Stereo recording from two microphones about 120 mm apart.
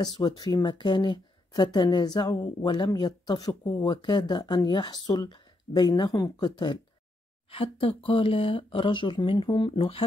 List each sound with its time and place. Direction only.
0.0 s speech: 35° left (ahead or behind)